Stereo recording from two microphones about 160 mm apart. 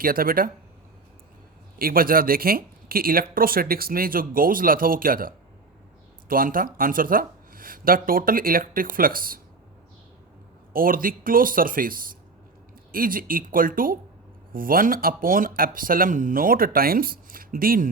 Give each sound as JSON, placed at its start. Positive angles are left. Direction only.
{"t": 0.0, "sound": "speech", "side_deg": -65}
{"t": 1.8, "sound": "speech", "side_deg": -65}
{"t": 10.7, "sound": "speech", "side_deg": -60}